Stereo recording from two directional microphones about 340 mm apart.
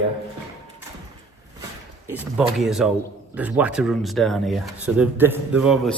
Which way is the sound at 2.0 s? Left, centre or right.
Centre.